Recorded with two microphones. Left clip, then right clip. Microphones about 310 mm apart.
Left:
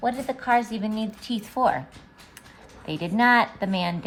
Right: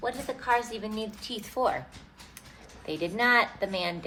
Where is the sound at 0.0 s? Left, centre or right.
Left.